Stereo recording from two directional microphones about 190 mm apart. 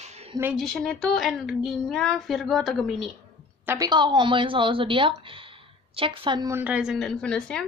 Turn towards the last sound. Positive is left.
turn(degrees=5)  # may be behind; listen again after turning